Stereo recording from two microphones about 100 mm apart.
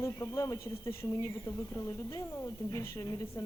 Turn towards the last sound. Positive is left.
turn(degrees=30)  # may be behind; listen again after turning